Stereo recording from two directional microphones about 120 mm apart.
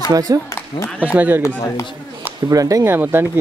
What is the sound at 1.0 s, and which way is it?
Speech, 15° right (ahead or behind).